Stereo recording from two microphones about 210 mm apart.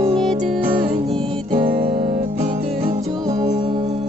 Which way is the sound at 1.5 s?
25° right (ahead or behind).